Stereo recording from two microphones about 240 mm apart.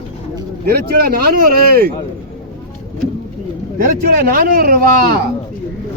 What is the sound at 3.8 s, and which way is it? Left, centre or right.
Speech, right.